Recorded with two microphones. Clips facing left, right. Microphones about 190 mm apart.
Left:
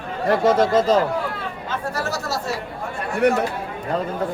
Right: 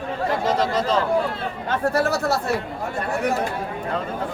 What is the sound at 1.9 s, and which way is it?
Speech, 60° right (ahead or behind).